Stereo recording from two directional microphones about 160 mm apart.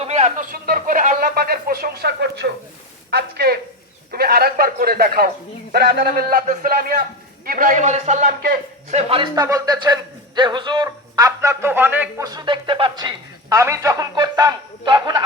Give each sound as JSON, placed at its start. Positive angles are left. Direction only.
{"t": 0.0, "sound": "a sound", "side_deg": -45}
{"t": 3.1, "sound": "a woman's voice", "side_deg": -90}
{"t": 4.1, "sound": "a man's voice", "side_deg": -75}
{"t": 5.7, "sound": "a man's voice", "side_deg": -80}
{"t": 6.4, "sound": "a man's voice", "side_deg": -55}
{"t": 8.9, "sound": "a man's voice", "side_deg": -40}
{"t": 9.3, "sound": "a man's voice", "side_deg": -20}
{"t": 10.8, "sound": "speech", "side_deg": -20}